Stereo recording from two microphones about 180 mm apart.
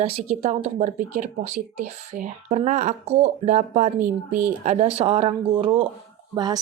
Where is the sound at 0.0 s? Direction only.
35° right (ahead or behind).